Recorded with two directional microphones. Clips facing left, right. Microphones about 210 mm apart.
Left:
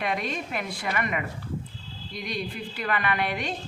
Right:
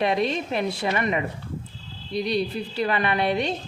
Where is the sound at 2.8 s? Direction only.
25° right (ahead or behind).